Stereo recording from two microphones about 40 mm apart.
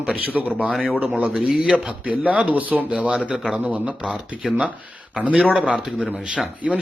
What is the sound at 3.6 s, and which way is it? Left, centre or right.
Speech, right.